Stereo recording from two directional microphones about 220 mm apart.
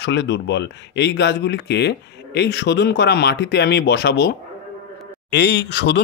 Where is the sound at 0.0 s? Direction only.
50° left (ahead or behind).